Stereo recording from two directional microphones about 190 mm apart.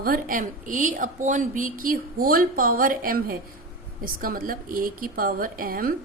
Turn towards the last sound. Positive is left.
turn(degrees=-50)  # may be behind; listen again after turning